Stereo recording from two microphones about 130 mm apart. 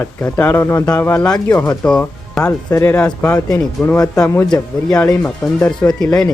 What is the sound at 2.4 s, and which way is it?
Speech, 25° left (ahead or behind).